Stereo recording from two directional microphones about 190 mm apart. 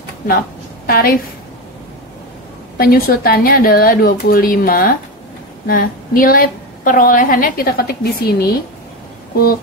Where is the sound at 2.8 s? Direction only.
50° left (ahead or behind).